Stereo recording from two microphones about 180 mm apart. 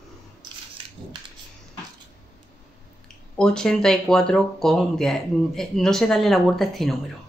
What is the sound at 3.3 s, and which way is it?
Speech, 5° left (ahead or behind).